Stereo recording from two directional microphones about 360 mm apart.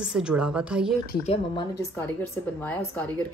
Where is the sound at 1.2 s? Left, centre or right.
Centre.